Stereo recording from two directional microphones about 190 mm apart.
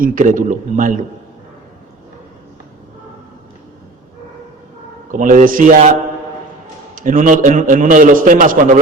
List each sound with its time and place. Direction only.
0.0 s a man's voice: 45° right (ahead or behind)
5.1 s a man's voice: 45° right (ahead or behind)
6.9 s a man's voice: 45° right (ahead or behind)